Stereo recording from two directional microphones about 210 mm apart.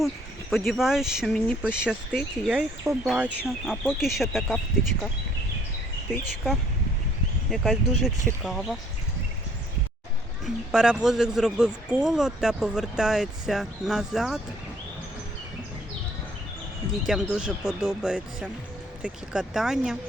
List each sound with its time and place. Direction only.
0.7 s speech: centre (ahead or behind)
6.1 s speech: centre (ahead or behind)
10.4 s speech: 5° right (ahead or behind)
17.1 s speech: 5° right (ahead or behind)